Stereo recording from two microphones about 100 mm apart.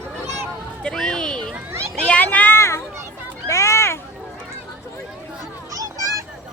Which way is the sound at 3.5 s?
30° left (ahead or behind).